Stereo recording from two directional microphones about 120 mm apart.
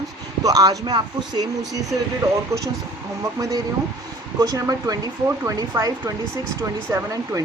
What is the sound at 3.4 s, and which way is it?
Speech, 30° right (ahead or behind).